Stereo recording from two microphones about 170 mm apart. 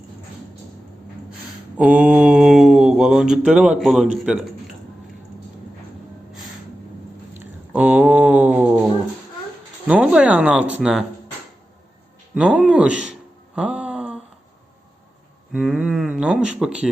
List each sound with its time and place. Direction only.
1.8 s mantra: 5° right (ahead or behind)
7.3 s cat: 10° right (ahead or behind)
9.8 s speech: 5° right (ahead or behind)
12.3 s speech: 5° right (ahead or behind)
13.6 s a sound: 5° right (ahead or behind)
15.5 s mantra: 5° right (ahead or behind)